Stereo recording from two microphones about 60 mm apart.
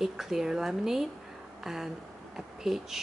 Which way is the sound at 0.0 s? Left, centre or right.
Centre.